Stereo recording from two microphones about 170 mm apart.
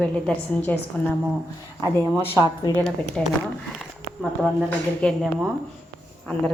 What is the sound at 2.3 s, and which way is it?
Speech, 15° left (ahead or behind).